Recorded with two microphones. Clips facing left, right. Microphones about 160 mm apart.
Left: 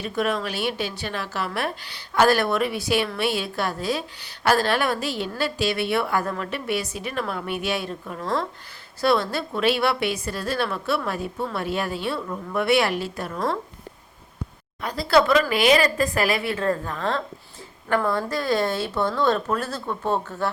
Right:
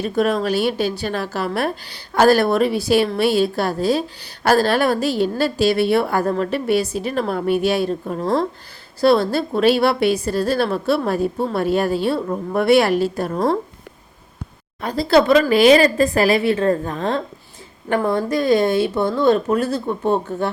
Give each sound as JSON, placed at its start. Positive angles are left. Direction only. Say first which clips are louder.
{"t": 0.0, "sound": "a woman's voice", "louder": "right 6 dB", "side_deg": -40}
{"t": 14.8, "sound": "a woman's voice", "louder": "right 4 dB", "side_deg": -30}